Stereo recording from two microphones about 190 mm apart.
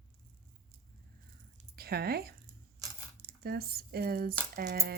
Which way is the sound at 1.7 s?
55° right (ahead or behind).